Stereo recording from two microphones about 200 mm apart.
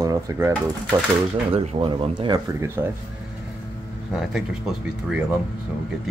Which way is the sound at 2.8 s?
10° right (ahead or behind).